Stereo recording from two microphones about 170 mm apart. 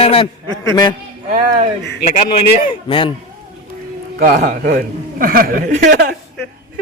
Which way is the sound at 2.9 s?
30° left (ahead or behind).